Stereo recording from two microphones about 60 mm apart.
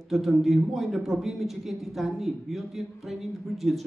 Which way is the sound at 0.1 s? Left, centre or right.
Centre.